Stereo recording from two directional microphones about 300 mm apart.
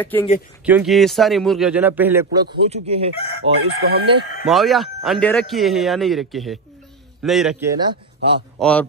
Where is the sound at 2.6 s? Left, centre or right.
Centre.